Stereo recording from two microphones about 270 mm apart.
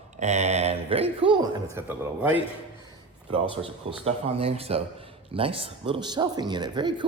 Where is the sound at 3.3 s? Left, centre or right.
Centre.